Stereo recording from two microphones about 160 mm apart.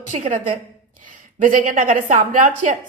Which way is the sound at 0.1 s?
45° right (ahead or behind).